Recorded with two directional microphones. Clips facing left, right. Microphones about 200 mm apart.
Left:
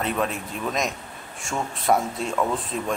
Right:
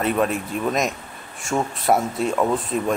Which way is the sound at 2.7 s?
50° right (ahead or behind).